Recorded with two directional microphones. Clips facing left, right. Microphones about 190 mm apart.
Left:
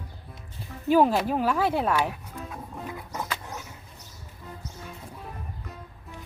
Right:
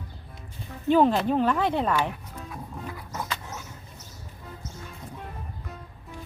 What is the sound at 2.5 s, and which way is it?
Music, 20° left (ahead or behind).